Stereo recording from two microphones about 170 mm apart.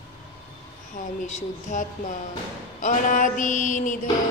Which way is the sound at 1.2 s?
50° left (ahead or behind).